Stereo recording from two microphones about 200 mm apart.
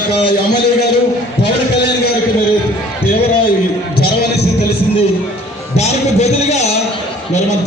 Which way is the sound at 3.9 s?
55° left (ahead or behind).